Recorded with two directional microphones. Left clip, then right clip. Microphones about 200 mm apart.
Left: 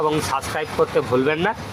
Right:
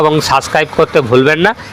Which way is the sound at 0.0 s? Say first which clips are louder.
Right 11 dB; 35° right (ahead or behind).